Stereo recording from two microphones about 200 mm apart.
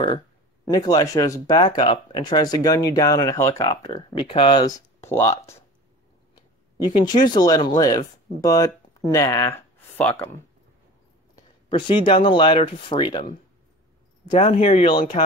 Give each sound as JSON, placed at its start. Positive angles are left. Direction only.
{"t": 0.7, "sound": "speech", "side_deg": 20}
{"t": 7.0, "sound": "speech", "side_deg": 20}
{"t": 11.7, "sound": "speech", "side_deg": 25}
{"t": 14.4, "sound": "speech", "side_deg": 35}